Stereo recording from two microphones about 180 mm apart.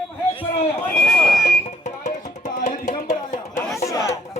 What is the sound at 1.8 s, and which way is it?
Music, 40° left (ahead or behind).